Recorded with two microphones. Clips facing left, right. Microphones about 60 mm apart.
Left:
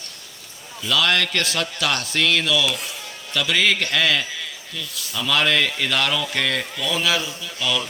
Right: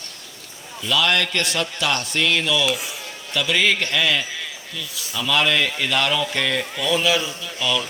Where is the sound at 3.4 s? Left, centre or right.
Centre.